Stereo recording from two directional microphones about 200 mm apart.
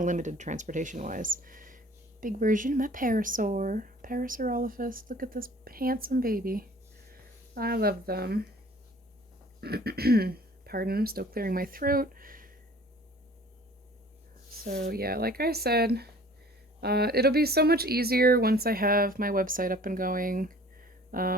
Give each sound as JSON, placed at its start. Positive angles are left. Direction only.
{"t": 0.0, "sound": "speech", "side_deg": -40}
{"t": 9.6, "sound": "speech", "side_deg": -50}
{"t": 14.6, "sound": "speech", "side_deg": -45}